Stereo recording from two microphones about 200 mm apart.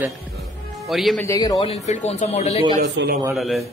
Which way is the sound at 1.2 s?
15° left (ahead or behind).